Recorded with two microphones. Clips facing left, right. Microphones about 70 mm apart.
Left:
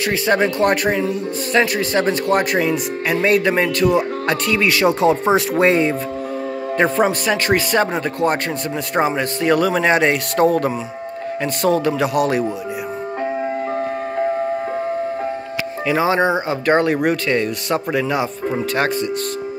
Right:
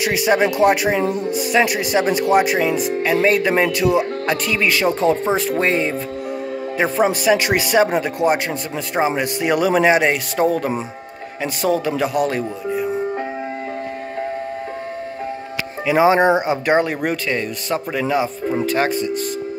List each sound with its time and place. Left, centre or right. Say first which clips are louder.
0.0 s music: right 1 dB; centre
1.5 s speech: left 1 dB; centre
6.8 s music: left 1 dB; centre
8.9 s speech: even; centre
16.0 s speech: right 4 dB; right
16.7 s speech: left 4 dB; centre